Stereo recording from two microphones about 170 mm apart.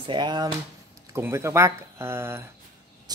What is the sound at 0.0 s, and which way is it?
Speech, 25° right (ahead or behind).